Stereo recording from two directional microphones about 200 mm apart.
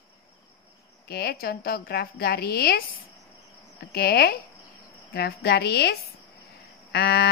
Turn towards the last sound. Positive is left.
turn(degrees=55)  # may be behind; listen again after turning